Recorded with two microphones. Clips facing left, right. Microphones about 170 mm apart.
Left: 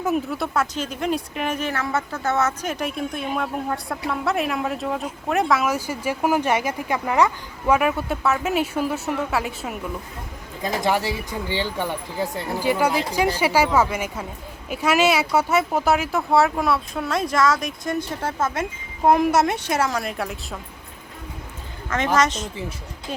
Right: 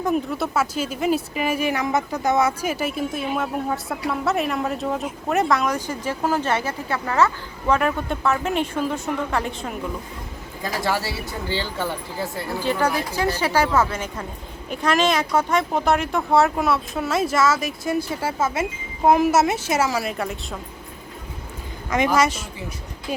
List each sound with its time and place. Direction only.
0.0 s speech: centre (ahead or behind)
10.6 s speech: 20° left (ahead or behind); by 20.6 s centre (ahead or behind)
21.8 s a woman's voice: 10° right (ahead or behind)